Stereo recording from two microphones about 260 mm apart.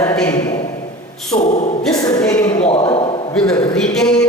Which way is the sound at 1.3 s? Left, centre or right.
Left.